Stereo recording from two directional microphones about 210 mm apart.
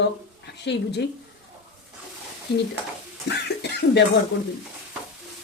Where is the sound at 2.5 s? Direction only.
50° left (ahead or behind).